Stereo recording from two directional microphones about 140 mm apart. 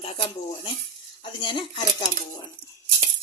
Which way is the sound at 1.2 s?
35° left (ahead or behind).